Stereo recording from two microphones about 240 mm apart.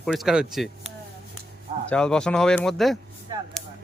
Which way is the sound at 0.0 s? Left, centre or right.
Centre.